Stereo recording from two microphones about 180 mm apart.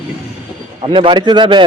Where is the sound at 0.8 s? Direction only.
30° right (ahead or behind).